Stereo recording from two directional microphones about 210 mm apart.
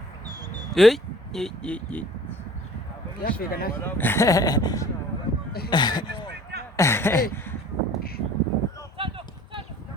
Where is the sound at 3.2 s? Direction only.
45° left (ahead or behind).